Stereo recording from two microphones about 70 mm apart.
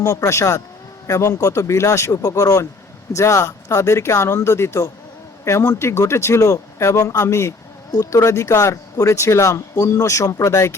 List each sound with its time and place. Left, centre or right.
0.0 s speech: left